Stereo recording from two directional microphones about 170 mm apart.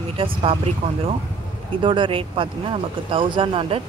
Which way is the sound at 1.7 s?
30° right (ahead or behind).